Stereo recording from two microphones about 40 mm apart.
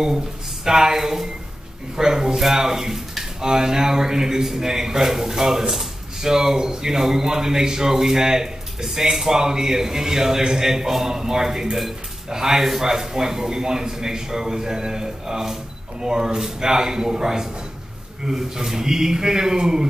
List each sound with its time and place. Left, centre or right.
0.7 s speech: centre